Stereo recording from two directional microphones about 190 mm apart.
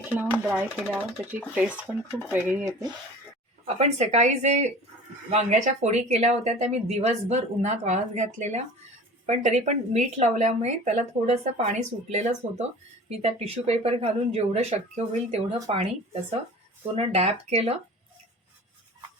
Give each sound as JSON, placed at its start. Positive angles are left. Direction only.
{"t": 0.1, "sound": "speech", "side_deg": -10}
{"t": 3.8, "sound": "speech", "side_deg": -35}
{"t": 16.9, "sound": "speech", "side_deg": -35}